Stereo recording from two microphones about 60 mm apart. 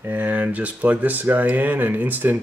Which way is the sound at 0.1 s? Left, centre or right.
Right.